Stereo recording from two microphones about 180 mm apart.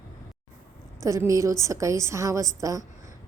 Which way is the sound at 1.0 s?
15° right (ahead or behind).